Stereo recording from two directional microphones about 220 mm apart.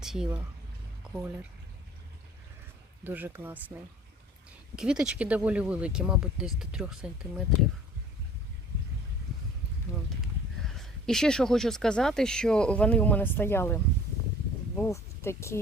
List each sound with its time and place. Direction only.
0.0 s speech: centre (ahead or behind)
3.0 s speech: 10° right (ahead or behind)
4.8 s speech: 5° right (ahead or behind)
10.6 s speech: centre (ahead or behind)
14.8 s speech: 10° left (ahead or behind)